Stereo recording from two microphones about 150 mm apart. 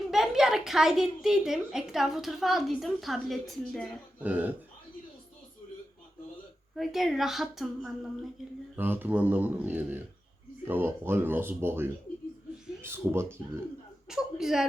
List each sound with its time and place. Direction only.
0.1 s a woman's voice: centre (ahead or behind)
4.2 s speech: 10° right (ahead or behind)
6.7 s a woman's voice: centre (ahead or behind)
8.7 s speech: 15° right (ahead or behind)
14.1 s a woman's voice: 5° right (ahead or behind)